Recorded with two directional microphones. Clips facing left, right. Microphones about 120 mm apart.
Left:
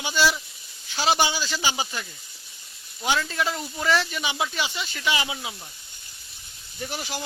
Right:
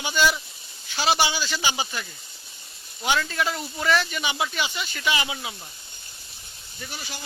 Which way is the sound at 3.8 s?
15° left (ahead or behind).